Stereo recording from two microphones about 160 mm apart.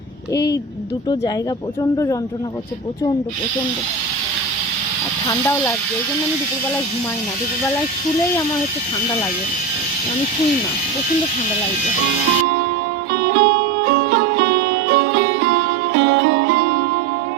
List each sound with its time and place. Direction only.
5.3 s speech: 15° left (ahead or behind)
13.1 s music: 90° right